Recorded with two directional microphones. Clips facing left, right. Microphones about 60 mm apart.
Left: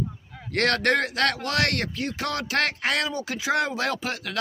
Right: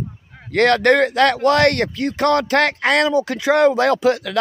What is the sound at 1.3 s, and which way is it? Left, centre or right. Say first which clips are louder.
Speech: right 11 dB; right.